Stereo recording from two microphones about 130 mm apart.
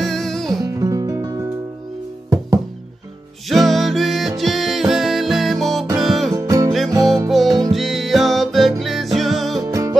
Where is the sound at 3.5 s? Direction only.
Centre (ahead or behind).